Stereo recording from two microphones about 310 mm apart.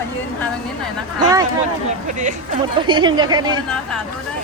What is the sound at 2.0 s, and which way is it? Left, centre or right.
Speech, right.